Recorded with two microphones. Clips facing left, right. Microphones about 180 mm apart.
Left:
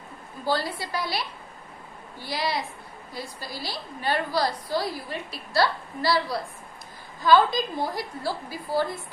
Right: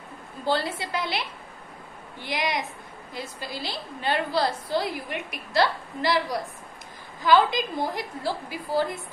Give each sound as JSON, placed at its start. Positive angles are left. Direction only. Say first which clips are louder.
{"t": 0.5, "sound": "a woman's voice", "louder": "right 1 dB", "side_deg": -25}